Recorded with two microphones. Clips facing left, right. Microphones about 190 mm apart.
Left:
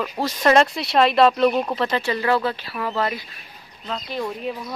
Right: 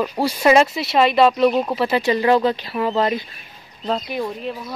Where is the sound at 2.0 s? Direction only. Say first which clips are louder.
Right 8 dB; 20° right (ahead or behind).